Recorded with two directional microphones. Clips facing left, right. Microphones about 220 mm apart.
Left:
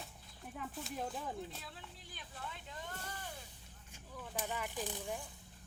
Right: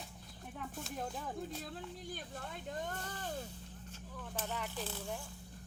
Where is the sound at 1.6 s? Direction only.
45° right (ahead or behind).